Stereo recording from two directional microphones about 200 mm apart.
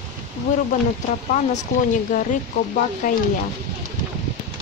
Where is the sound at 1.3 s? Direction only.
40° left (ahead or behind).